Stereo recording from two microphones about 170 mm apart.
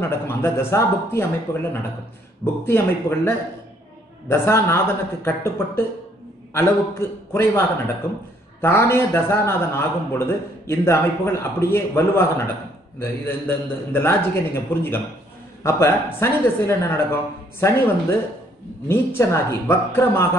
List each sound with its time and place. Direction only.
0.0 s a man's voice: 15° left (ahead or behind)
18.9 s a man's voice: 15° left (ahead or behind)